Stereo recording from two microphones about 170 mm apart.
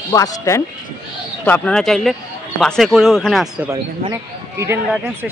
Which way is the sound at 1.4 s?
5° left (ahead or behind).